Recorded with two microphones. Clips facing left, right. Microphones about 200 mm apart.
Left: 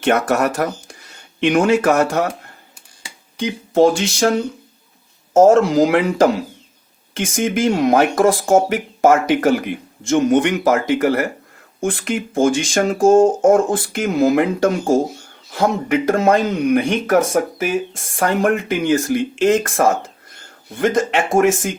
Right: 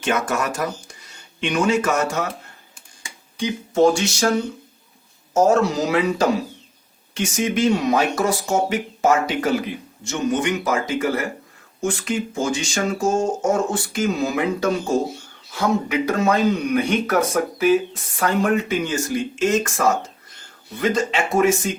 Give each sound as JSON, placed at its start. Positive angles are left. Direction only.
{"t": 0.0, "sound": "speech", "side_deg": 65}
{"t": 5.3, "sound": "speech", "side_deg": 50}